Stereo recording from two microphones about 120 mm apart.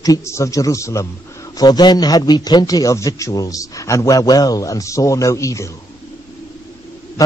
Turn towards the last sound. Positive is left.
turn(degrees=30)  # may be behind; listen again after turning